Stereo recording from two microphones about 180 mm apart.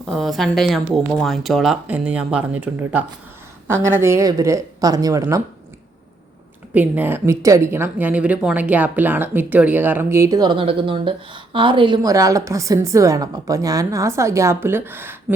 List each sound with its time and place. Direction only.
0.0 s speech: centre (ahead or behind); by 5.4 s 20° right (ahead or behind)
6.7 s speech: 10° right (ahead or behind)